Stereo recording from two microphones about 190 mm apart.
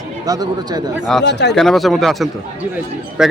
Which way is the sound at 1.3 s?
65° left (ahead or behind).